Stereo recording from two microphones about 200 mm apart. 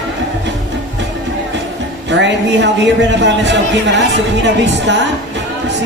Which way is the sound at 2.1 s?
60° right (ahead or behind).